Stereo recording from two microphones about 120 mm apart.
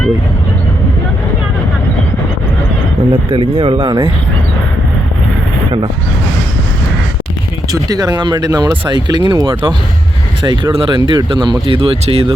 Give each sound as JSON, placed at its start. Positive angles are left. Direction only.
{"t": 3.1, "sound": "speech", "side_deg": -50}
{"t": 7.7, "sound": "speech", "side_deg": -30}